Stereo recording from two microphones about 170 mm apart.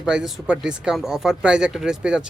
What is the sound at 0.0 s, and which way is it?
Speech, 5° right (ahead or behind).